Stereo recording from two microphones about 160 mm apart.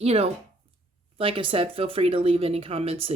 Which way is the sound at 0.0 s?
40° right (ahead or behind).